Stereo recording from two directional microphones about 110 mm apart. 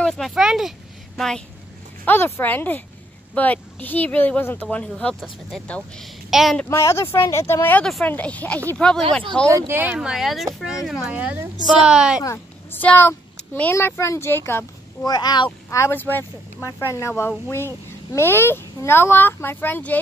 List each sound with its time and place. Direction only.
0.0 s speech: centre (ahead or behind)
2.0 s speech: 20° left (ahead or behind); by 6.6 s centre (ahead or behind)
6.6 s a child's voice: 25° left (ahead or behind); by 9.0 s 5° left (ahead or behind)
9.5 s speech: 25° right (ahead or behind)
9.9 s speech: 5° right (ahead or behind)
11.1 s a woman's voice: 15° right (ahead or behind)
12.7 s a child's voice: 15° left (ahead or behind)
15.0 s speech: 40° left (ahead or behind)
15.7 s a child's voice: 20° left (ahead or behind)